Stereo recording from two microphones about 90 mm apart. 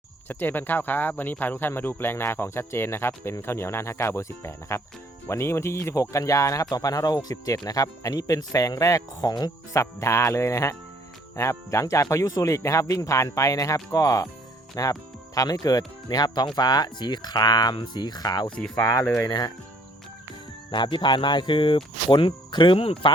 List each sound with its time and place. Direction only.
0.3 s speech: 20° left (ahead or behind); by 9.8 s 45° left (ahead or behind)
9.8 s speech: 30° left (ahead or behind); by 18.5 s 50° left (ahead or behind)
18.9 s speech: 35° left (ahead or behind)
19.3 s speech: 50° left (ahead or behind)
20.7 s speech: 60° left (ahead or behind); by 23.1 s 80° left